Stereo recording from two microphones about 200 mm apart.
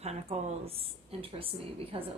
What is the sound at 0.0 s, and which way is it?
A woman's voice, 30° right (ahead or behind).